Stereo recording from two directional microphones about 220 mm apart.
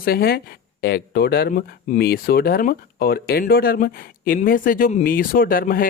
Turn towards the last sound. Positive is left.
turn(degrees=40)  # may be behind; listen again after turning